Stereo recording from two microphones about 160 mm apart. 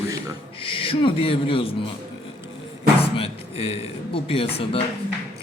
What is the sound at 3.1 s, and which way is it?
A man's voice, 35° left (ahead or behind).